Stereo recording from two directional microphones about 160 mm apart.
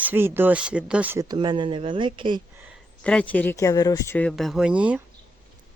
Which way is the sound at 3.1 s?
10° left (ahead or behind).